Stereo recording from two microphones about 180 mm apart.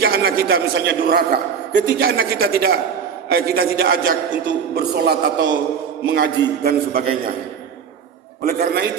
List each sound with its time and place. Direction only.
0.0 s a man's voice: 60° right (ahead or behind)
8.4 s a man's voice: 60° right (ahead or behind)